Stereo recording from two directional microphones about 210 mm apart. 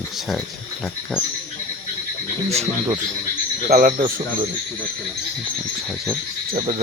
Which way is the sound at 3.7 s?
40° right (ahead or behind).